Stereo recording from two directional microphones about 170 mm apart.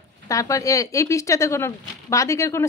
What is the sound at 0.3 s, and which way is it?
A woman's voice, 20° left (ahead or behind).